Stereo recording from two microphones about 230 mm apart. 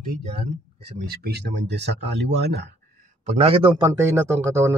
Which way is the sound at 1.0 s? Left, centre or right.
Right.